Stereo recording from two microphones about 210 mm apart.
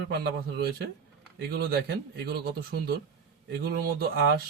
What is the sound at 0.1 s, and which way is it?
Speech, 50° right (ahead or behind).